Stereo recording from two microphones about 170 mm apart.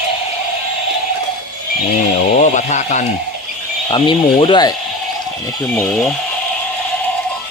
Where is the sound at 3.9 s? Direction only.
30° left (ahead or behind).